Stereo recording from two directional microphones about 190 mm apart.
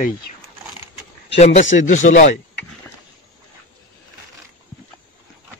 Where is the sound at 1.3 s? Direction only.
35° left (ahead or behind).